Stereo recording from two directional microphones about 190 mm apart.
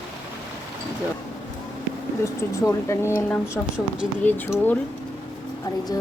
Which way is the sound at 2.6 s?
15° left (ahead or behind).